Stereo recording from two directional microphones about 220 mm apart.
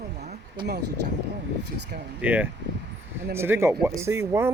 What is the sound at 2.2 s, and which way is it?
Speech, 5° right (ahead or behind).